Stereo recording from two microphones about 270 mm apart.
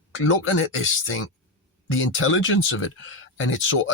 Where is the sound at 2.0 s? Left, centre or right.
Left.